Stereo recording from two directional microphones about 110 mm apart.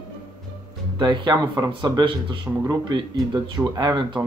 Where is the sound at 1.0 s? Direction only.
40° right (ahead or behind).